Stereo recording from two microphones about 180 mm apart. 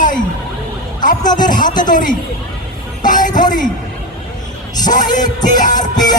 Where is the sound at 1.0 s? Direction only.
45° left (ahead or behind).